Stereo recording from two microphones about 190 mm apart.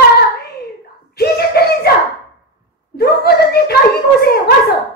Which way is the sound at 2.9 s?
55° left (ahead or behind).